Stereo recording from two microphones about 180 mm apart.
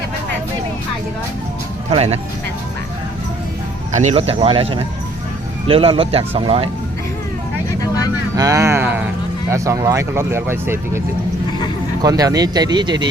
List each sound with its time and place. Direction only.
1.9 s speech: 35° right (ahead or behind)
3.9 s speech: 35° right (ahead or behind)
8.4 s speech: 15° right (ahead or behind)
12.0 s speech: 20° right (ahead or behind)